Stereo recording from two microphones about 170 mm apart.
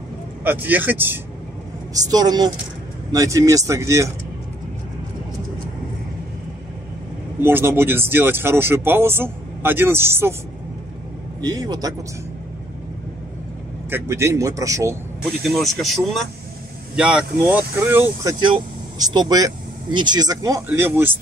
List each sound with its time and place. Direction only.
0.4 s speech: 10° right (ahead or behind)
2.0 s speech: 25° right (ahead or behind)
7.3 s speech: 15° right (ahead or behind)
11.4 s speech: 20° right (ahead or behind)
13.8 s speech: 15° right (ahead or behind)
15.4 s speech: centre (ahead or behind)
18.4 s speech: 25° right (ahead or behind)